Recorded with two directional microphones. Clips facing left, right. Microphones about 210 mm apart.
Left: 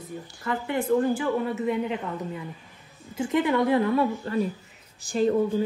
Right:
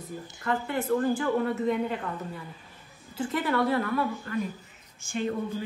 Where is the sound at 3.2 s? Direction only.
20° left (ahead or behind).